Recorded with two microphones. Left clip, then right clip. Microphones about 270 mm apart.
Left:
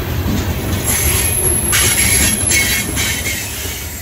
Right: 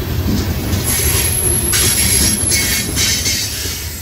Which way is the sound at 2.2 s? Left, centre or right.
Left.